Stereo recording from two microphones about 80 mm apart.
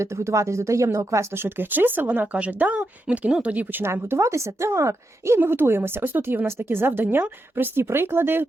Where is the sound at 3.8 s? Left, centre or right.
Right.